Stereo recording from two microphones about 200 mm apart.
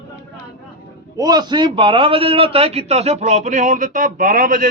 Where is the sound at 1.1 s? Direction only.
20° right (ahead or behind).